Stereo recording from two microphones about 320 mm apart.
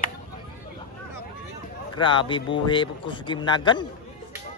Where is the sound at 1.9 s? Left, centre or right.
Centre.